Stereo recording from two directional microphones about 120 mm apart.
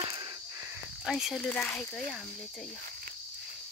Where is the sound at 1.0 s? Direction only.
Centre (ahead or behind).